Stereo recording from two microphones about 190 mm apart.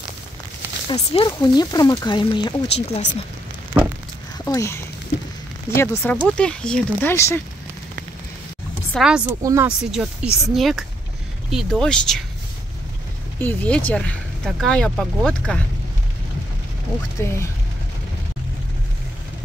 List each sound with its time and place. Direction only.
0.8 s speech: 25° left (ahead or behind)
4.5 s speech: 15° left (ahead or behind)
8.9 s speech: 5° right (ahead or behind)
9.4 s speech: 15° right (ahead or behind)
9.7 s speech: 5° right (ahead or behind)
13.4 s speech: 10° left (ahead or behind)
17.2 s speech: 15° left (ahead or behind)